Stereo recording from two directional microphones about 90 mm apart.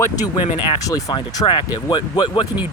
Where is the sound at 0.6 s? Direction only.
70° left (ahead or behind).